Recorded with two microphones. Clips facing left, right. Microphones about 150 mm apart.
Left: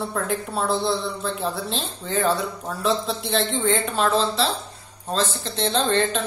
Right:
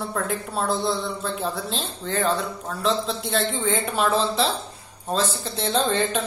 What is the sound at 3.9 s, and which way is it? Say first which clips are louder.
Speech: left 1 dB; 15° right (ahead or behind).